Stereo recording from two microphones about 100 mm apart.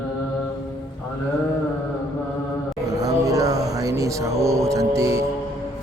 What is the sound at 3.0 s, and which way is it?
Music, 35° right (ahead or behind).